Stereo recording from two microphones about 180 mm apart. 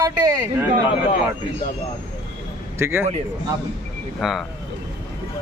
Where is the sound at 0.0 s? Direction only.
15° right (ahead or behind).